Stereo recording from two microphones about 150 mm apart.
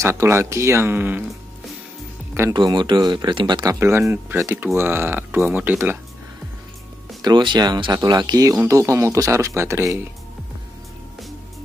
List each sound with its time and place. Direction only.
0.0 s speech: 15° right (ahead or behind)
2.5 s speech: 30° right (ahead or behind)
3.8 s speech: 15° right (ahead or behind)
7.2 s speech: 30° right (ahead or behind)